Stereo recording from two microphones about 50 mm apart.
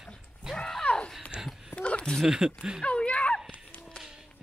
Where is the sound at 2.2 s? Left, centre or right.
Centre.